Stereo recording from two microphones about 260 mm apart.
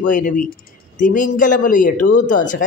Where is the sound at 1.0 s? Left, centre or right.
Left.